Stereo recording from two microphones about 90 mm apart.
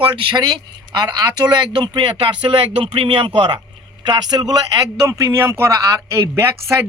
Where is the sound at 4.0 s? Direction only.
55° right (ahead or behind).